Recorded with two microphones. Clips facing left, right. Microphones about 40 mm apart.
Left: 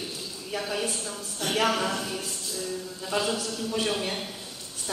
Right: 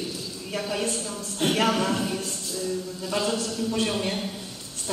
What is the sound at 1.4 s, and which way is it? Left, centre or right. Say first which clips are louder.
Speech: right 6 dB; right.